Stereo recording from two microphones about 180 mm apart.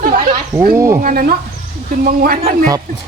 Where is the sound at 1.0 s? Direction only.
55° right (ahead or behind).